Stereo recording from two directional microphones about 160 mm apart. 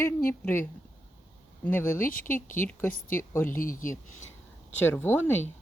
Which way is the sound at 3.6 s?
60° left (ahead or behind).